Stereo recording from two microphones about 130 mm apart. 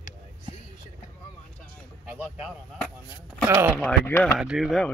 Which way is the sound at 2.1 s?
10° right (ahead or behind).